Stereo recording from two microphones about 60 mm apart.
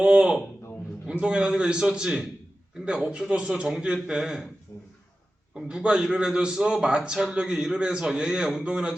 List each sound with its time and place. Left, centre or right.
0.0 s a man's voice: centre
4.7 s a sound: left
5.5 s a man's voice: centre